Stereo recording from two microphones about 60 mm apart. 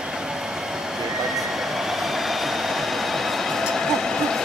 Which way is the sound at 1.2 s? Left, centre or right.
Centre.